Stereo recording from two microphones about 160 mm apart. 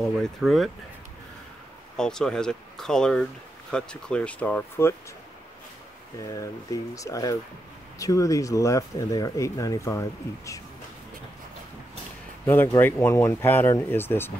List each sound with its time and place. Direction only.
0.2 s speech: centre (ahead or behind)
2.0 s speech: 5° left (ahead or behind)
6.1 s speech: 20° left (ahead or behind)
12.4 s speech: 15° left (ahead or behind)